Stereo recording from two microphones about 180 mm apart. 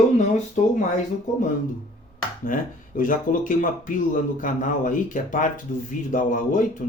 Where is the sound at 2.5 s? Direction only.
50° left (ahead or behind).